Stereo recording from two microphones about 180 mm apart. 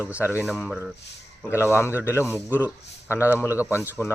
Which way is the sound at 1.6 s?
15° left (ahead or behind).